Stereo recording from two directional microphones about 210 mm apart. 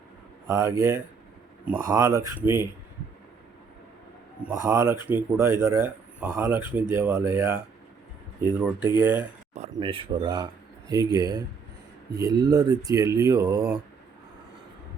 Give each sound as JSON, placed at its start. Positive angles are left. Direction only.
{"t": 0.4, "sound": "speech", "side_deg": -15}
{"t": 4.7, "sound": "speech", "side_deg": -15}
{"t": 9.7, "sound": "speech", "side_deg": -25}